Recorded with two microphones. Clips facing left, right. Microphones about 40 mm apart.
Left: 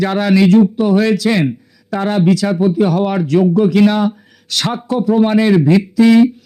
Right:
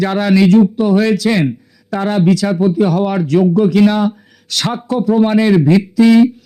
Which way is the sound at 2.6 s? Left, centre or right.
Centre.